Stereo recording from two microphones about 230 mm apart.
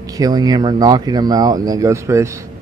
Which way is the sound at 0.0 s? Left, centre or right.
Centre.